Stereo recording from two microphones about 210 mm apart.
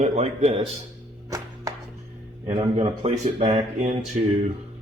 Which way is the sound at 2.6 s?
25° right (ahead or behind).